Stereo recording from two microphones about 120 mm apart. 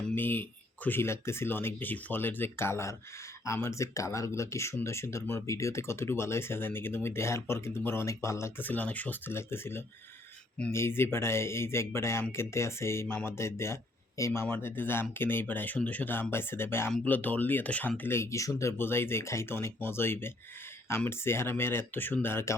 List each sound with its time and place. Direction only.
0.0 s speech: 15° left (ahead or behind)